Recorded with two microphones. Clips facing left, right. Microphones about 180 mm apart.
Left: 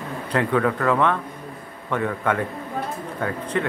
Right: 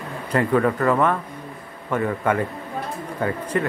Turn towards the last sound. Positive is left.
turn(degrees=-5)  # may be behind; listen again after turning